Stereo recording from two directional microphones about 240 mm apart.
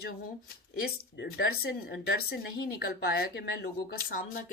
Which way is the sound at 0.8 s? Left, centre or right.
Left.